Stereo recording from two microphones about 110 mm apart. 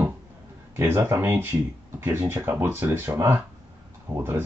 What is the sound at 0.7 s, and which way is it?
Speech, 20° right (ahead or behind).